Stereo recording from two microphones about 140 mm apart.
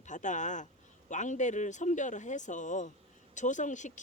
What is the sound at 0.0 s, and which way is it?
Speech, 60° left (ahead or behind).